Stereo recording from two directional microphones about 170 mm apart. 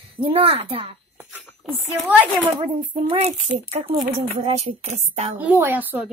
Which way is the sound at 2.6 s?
40° right (ahead or behind).